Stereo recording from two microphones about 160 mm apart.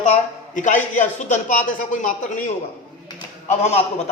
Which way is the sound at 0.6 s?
55° left (ahead or behind).